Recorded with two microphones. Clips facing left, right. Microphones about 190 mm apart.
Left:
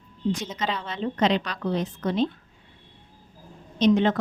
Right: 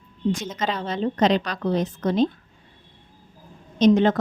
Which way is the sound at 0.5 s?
45° right (ahead or behind).